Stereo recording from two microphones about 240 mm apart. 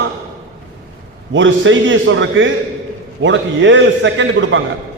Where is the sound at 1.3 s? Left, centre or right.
Right.